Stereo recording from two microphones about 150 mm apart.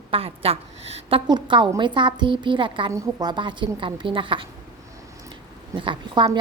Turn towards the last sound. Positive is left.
turn(degrees=-30)  # may be behind; listen again after turning